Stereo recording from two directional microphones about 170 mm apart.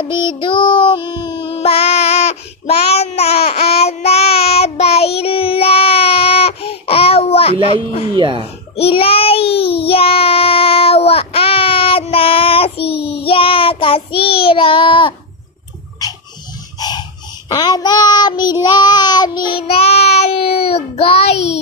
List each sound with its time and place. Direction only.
0.0 s child singing: 30° left (ahead or behind)
8.1 s speech: 30° right (ahead or behind)
8.7 s child singing: 35° left (ahead or behind)
12.9 s child singing: 75° left (ahead or behind)
13.2 s child singing: 30° left (ahead or behind)
16.7 s dog: 25° left (ahead or behind)
17.5 s child singing: 25° left (ahead or behind)